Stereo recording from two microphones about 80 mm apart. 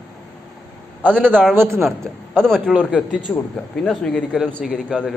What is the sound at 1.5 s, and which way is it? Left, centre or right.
Speech, right.